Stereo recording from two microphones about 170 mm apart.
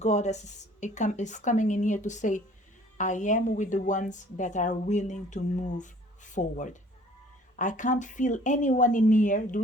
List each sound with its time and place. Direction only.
0.0 s a woman's voice: 40° left (ahead or behind)